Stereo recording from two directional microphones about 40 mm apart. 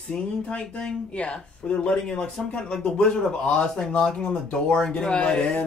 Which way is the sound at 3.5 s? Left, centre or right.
Centre.